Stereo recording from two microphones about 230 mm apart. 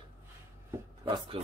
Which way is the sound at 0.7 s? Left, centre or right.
Right.